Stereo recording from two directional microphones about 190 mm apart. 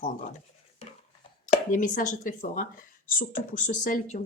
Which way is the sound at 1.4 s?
45° left (ahead or behind).